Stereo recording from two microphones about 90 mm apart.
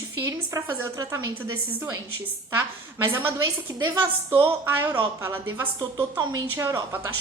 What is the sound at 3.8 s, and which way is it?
A woman's voice, 30° right (ahead or behind).